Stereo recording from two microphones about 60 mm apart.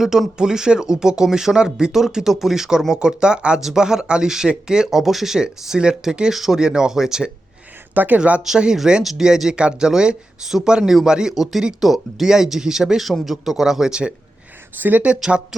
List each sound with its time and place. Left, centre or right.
0.0 s speech: centre
7.9 s speech: right
8.4 s speech: centre
14.8 s speech: right